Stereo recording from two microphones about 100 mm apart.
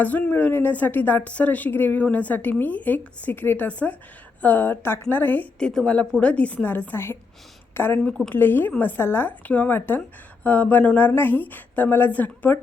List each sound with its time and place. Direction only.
0.0 s a woman's voice: 15° left (ahead or behind)
8.0 s a woman's voice: 10° left (ahead or behind)
8.4 s a woman's voice: 20° left (ahead or behind)